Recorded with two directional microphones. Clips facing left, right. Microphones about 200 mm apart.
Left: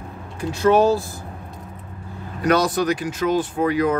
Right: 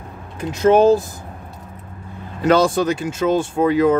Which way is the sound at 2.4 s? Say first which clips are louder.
Right 3 dB; 25° right (ahead or behind).